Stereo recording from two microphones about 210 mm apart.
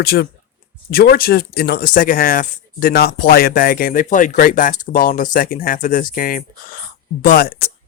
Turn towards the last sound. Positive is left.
turn(degrees=45)  # may be behind; listen again after turning